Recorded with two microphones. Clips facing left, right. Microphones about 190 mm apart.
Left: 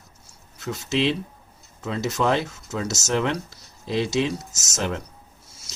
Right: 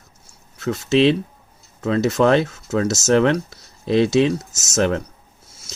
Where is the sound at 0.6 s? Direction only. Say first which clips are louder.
Right 8 dB; 65° right (ahead or behind).